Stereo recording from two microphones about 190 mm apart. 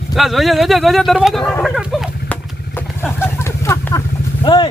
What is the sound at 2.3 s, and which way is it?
Vehicle, 10° left (ahead or behind).